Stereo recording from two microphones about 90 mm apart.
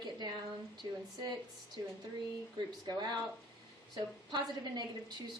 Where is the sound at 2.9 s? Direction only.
50° right (ahead or behind).